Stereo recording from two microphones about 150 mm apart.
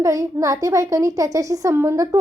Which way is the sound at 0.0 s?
20° right (ahead or behind).